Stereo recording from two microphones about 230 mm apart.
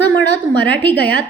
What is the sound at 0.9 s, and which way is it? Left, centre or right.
Speech, left.